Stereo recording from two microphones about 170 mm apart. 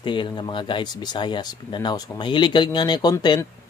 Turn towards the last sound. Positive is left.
turn(degrees=25)  # may be behind; listen again after turning